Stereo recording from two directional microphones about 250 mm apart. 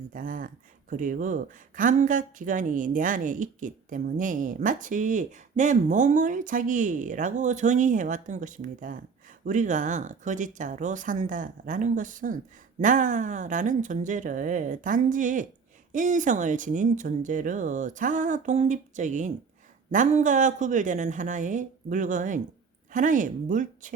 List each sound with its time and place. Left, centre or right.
0.1 s speech: right